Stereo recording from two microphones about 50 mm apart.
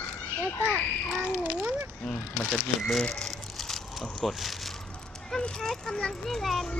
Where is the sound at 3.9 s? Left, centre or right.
Centre.